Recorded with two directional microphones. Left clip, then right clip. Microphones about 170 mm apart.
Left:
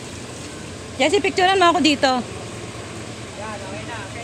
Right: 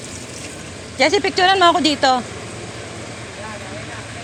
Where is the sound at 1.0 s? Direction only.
10° left (ahead or behind).